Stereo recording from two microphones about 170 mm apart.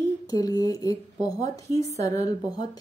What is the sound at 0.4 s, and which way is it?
A woman's voice, 20° left (ahead or behind).